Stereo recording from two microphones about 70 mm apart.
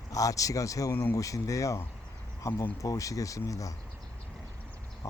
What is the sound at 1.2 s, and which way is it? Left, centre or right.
Speech, left.